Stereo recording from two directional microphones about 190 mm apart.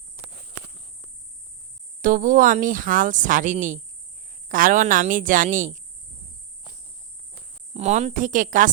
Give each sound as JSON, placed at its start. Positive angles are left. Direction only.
{"t": 2.0, "sound": "speech", "side_deg": -45}
{"t": 7.7, "sound": "speech", "side_deg": -35}